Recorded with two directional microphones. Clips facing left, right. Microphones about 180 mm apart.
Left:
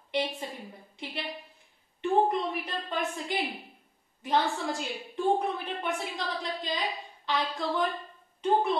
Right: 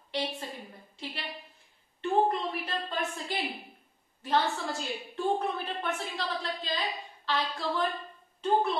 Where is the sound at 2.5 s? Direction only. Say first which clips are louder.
Left 1 dB; 15° left (ahead or behind).